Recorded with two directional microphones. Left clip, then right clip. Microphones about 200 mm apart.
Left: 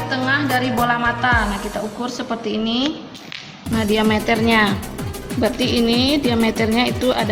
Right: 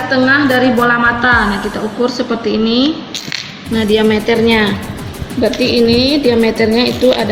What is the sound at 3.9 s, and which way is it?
Speech, 55° left (ahead or behind).